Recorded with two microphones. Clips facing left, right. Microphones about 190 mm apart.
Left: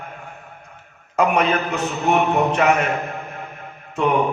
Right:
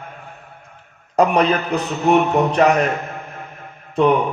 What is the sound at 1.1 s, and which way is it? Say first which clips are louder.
A man's voice: right 3 dB; 35° right (ahead or behind).